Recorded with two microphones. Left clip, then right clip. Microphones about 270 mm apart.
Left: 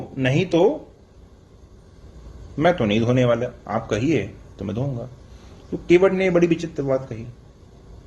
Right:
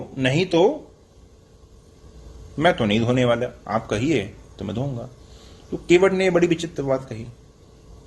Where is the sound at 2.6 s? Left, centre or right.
Right.